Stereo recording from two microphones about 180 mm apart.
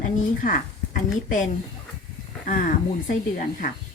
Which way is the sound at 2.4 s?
50° left (ahead or behind).